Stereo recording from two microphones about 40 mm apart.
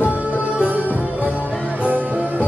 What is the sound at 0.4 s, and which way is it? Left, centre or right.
Music, right.